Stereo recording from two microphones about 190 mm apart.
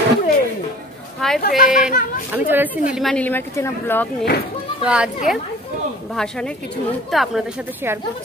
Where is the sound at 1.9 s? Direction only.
45° left (ahead or behind).